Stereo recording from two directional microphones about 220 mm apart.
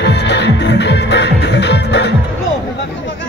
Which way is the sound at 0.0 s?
50° left (ahead or behind).